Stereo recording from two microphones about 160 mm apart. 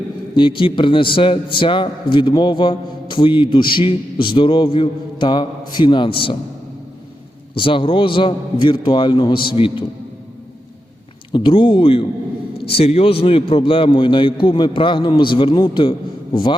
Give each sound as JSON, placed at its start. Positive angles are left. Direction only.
{"t": 0.3, "sound": "a man's voice", "side_deg": 30}
{"t": 7.5, "sound": "a man's voice", "side_deg": 35}
{"t": 11.3, "sound": "a man's voice", "side_deg": 30}